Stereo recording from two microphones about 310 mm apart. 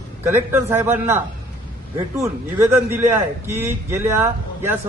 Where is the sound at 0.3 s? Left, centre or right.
Centre.